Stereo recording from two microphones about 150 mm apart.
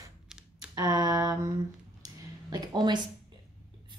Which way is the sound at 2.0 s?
25° right (ahead or behind).